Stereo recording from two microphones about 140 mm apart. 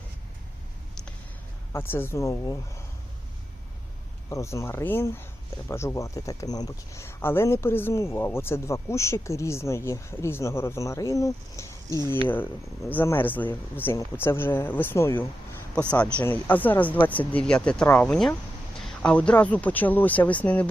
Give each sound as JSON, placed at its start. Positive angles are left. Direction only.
{"t": 1.7, "sound": "speech", "side_deg": 15}
{"t": 4.3, "sound": "speech", "side_deg": 20}